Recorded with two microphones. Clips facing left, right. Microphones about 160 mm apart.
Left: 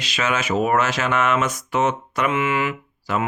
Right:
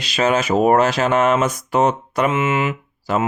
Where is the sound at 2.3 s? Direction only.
20° right (ahead or behind).